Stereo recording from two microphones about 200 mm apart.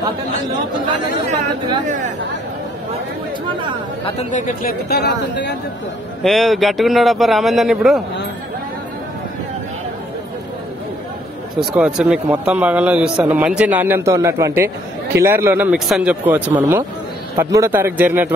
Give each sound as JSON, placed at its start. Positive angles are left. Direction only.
{"t": 1.9, "sound": "speech", "side_deg": -40}
{"t": 4.0, "sound": "speech", "side_deg": 35}
{"t": 6.2, "sound": "a man's voice", "side_deg": 0}
{"t": 11.6, "sound": "a man's voice", "side_deg": -5}